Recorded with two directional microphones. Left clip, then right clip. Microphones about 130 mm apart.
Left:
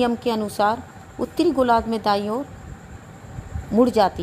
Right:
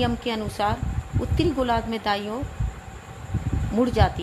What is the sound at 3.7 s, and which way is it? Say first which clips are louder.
Speech: left 5 dB; 50° left (ahead or behind).